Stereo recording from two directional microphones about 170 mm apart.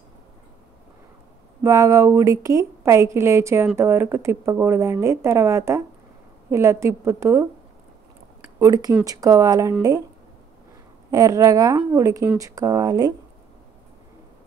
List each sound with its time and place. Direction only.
1.6 s a woman's voice: 20° right (ahead or behind)
8.5 s speech: 20° right (ahead or behind)
11.1 s speech: 20° right (ahead or behind)